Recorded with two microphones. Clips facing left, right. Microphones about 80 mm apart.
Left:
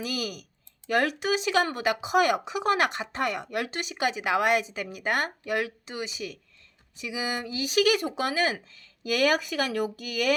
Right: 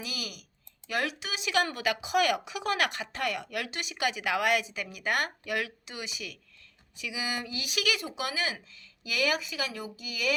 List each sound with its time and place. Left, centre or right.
0.0 s speech: left